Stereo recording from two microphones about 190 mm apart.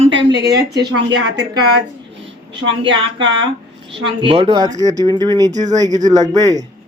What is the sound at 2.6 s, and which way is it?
A woman's voice, 25° right (ahead or behind).